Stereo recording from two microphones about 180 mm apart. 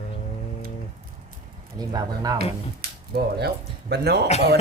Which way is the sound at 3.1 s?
60° right (ahead or behind).